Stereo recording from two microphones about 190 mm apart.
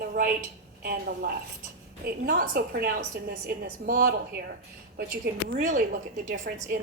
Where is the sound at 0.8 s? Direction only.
55° right (ahead or behind).